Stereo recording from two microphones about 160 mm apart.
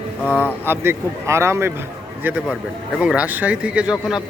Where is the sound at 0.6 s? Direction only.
15° right (ahead or behind).